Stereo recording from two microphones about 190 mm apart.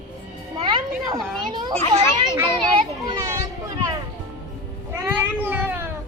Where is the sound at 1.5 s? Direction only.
25° right (ahead or behind).